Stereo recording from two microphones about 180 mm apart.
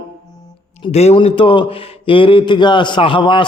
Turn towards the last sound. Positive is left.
turn(degrees=25)  # may be behind; listen again after turning